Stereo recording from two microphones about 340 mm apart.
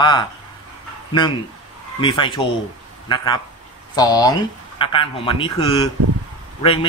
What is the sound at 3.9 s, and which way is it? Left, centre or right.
A man's voice, centre.